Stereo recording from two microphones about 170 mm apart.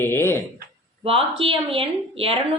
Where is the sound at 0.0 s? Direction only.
15° left (ahead or behind).